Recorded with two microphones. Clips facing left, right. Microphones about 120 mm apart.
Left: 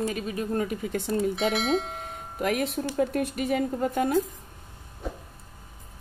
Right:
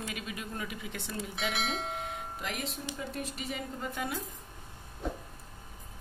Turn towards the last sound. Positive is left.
turn(degrees=5)  # may be behind; listen again after turning